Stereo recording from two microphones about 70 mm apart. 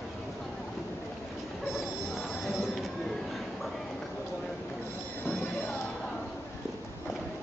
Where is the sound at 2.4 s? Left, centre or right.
Centre.